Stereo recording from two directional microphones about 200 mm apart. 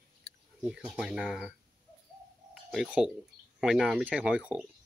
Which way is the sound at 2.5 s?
Centre (ahead or behind).